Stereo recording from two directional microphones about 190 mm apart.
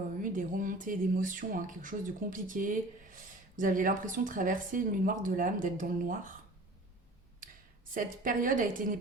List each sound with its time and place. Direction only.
0.2 s speech: 45° right (ahead or behind)
7.9 s speech: 45° right (ahead or behind)